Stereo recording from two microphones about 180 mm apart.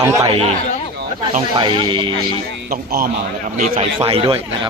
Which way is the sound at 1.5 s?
25° right (ahead or behind).